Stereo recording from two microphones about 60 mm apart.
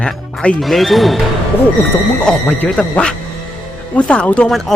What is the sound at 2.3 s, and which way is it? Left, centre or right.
Speech, centre.